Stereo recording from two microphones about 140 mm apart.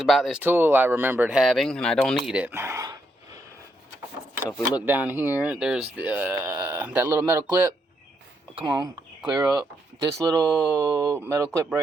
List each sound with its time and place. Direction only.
0.0 s speech: centre (ahead or behind)
0.4 s speech: 15° right (ahead or behind)
2.5 s speech: 20° right (ahead or behind)
4.9 s speech: 15° right (ahead or behind)
8.7 s speech: 25° right (ahead or behind)